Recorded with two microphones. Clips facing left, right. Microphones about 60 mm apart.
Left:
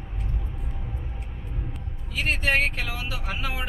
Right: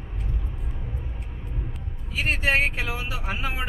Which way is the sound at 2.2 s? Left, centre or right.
Centre.